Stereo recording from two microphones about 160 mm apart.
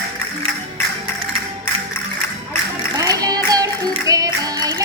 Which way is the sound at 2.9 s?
25° right (ahead or behind).